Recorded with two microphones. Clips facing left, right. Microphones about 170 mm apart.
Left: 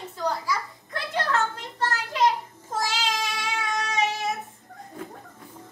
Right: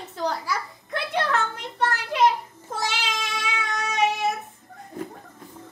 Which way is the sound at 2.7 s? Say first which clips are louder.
Left 1 dB; 65° right (ahead or behind).